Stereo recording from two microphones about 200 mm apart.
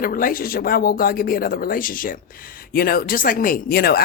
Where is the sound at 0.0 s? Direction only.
45° left (ahead or behind).